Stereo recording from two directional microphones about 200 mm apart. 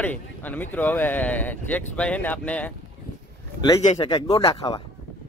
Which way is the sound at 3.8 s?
30° left (ahead or behind).